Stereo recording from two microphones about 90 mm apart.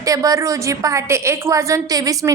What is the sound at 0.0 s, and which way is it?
A woman's voice, 40° right (ahead or behind).